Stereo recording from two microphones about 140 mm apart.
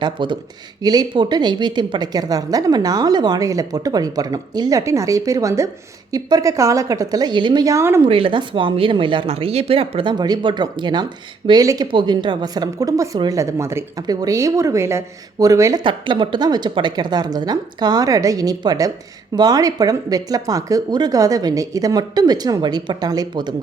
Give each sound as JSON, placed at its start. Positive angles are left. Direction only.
{"t": 0.0, "sound": "a woman's voice", "side_deg": -35}
{"t": 8.0, "sound": "a woman's voice", "side_deg": -40}
{"t": 15.8, "sound": "a woman's voice", "side_deg": -35}